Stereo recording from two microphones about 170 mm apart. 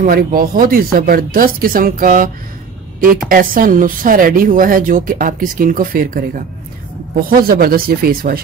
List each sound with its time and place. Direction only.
0.0 s speech: 55° right (ahead or behind)